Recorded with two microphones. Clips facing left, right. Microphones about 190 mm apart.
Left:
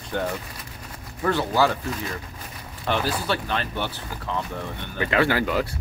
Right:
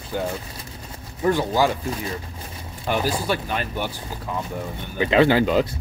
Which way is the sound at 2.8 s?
10° right (ahead or behind).